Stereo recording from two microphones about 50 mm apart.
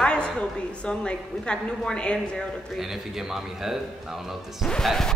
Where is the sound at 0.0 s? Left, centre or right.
Centre.